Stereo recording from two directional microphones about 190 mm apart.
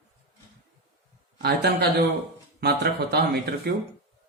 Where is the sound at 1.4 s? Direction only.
55° right (ahead or behind).